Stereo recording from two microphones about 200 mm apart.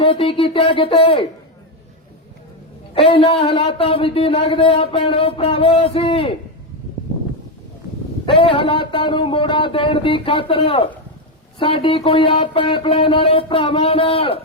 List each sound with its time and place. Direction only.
0.0 s speech: 25° left (ahead or behind)
2.9 s speech: 25° left (ahead or behind)
8.3 s speech: 25° left (ahead or behind)